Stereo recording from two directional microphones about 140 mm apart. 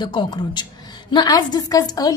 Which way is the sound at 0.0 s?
35° left (ahead or behind).